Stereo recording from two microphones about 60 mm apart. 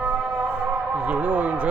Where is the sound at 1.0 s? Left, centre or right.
Right.